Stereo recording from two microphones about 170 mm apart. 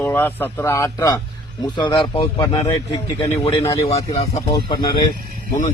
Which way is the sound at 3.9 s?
40° left (ahead or behind).